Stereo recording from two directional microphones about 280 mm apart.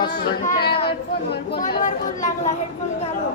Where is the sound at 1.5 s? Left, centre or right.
Left.